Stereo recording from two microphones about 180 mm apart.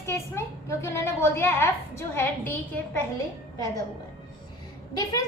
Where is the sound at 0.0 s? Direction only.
15° left (ahead or behind).